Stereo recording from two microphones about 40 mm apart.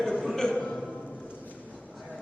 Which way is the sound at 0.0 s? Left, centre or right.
Centre.